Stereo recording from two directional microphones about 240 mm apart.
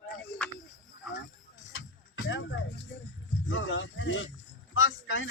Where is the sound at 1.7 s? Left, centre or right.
Left.